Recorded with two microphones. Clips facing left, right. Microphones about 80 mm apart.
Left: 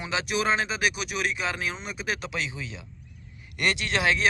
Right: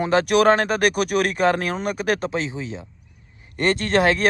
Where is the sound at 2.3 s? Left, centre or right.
Right.